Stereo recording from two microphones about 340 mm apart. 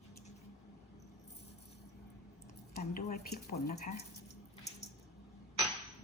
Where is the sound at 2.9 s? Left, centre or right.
Left.